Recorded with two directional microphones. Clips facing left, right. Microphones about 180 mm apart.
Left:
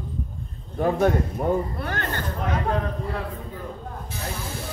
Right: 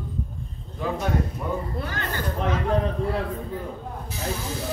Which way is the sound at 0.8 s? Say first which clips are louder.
Left 5 dB; 55° left (ahead or behind).